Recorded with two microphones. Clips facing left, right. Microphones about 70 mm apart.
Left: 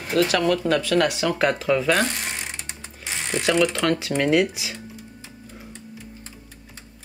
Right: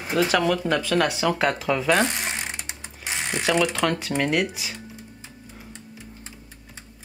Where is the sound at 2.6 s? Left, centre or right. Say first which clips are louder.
Right 1 dB; centre.